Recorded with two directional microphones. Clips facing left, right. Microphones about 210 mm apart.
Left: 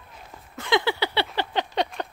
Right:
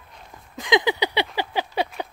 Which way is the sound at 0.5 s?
15° right (ahead or behind).